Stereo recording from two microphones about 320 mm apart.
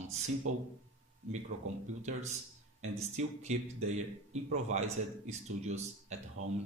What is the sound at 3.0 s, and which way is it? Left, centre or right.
Speech, right.